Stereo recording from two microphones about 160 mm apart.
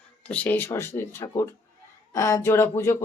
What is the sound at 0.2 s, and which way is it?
Speech, 10° left (ahead or behind).